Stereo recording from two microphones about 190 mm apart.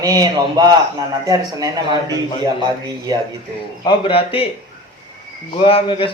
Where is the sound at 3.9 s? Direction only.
30° left (ahead or behind).